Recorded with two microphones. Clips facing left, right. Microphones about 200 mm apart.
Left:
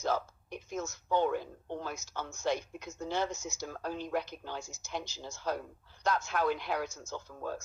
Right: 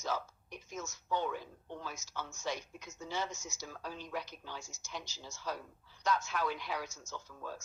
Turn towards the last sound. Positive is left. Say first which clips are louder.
# left 6 dB
turn(degrees=45)  # may be behind; listen again after turning